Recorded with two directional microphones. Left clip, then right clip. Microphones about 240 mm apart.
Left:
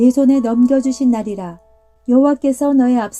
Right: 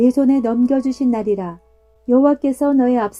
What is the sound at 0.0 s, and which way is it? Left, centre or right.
Speech, left.